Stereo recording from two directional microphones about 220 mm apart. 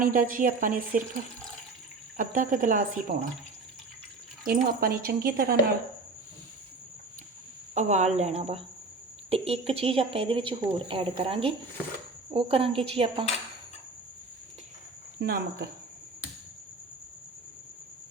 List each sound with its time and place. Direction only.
0.0 s speech: 40° right (ahead or behind)
2.1 s speech: 35° right (ahead or behind)
4.4 s speech: 45° right (ahead or behind)
7.7 s speech: 30° right (ahead or behind)
15.2 s speech: 50° right (ahead or behind)